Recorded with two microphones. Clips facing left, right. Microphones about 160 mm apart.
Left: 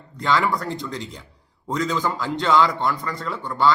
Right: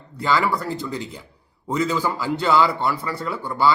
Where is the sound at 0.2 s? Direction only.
5° right (ahead or behind).